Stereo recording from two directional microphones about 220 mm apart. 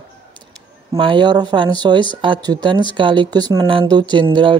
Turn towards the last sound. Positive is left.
turn(degrees=-20)  # may be behind; listen again after turning